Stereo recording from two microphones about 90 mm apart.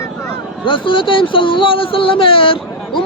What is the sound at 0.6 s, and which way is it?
Speech, 70° left (ahead or behind).